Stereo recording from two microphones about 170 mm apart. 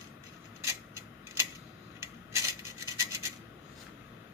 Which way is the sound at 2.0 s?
15° right (ahead or behind).